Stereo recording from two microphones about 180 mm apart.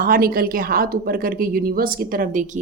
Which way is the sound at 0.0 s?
55° right (ahead or behind).